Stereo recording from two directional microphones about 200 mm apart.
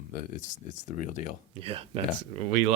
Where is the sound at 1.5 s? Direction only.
30° right (ahead or behind).